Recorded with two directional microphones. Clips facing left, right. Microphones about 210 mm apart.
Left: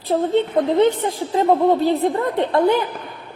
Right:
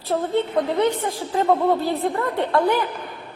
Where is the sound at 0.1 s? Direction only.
25° left (ahead or behind).